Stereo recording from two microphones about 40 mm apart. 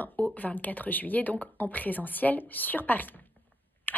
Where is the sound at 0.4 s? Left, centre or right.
Left.